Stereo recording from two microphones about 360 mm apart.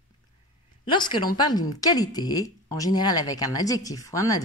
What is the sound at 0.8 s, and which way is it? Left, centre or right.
A woman's voice, centre.